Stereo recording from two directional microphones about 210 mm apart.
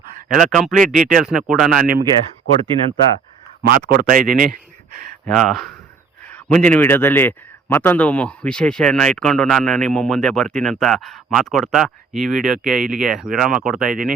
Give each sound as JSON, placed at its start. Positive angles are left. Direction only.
{"t": 0.3, "sound": "a man's voice", "side_deg": 0}
{"t": 3.6, "sound": "speech", "side_deg": -45}
{"t": 5.2, "sound": "a man's voice", "side_deg": 5}